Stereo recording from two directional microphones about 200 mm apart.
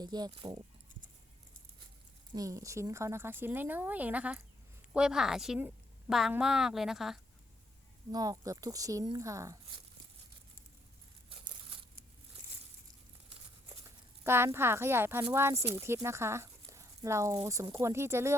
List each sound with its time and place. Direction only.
0.0 s speech: 20° right (ahead or behind)
2.3 s a woman's voice: 15° right (ahead or behind); by 7.2 s centre (ahead or behind)
8.1 s speech: 20° right (ahead or behind)
13.8 s speech: 10° right (ahead or behind)